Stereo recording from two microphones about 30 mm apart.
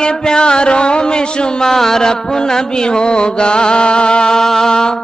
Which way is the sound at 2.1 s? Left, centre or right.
Left.